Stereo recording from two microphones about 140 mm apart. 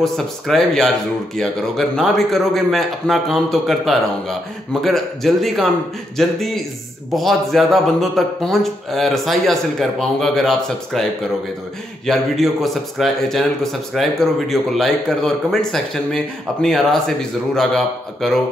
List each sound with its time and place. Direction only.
0.0 s a man's voice: centre (ahead or behind)
12.1 s a man's voice: centre (ahead or behind)